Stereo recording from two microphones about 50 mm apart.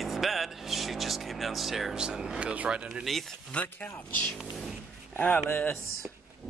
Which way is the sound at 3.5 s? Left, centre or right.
Left.